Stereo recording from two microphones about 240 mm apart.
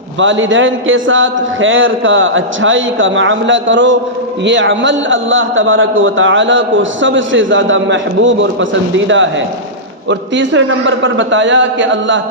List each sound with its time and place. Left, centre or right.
0.2 s a man's voice: right